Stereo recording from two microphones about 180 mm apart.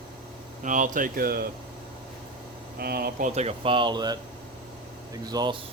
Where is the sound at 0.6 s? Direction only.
45° right (ahead or behind).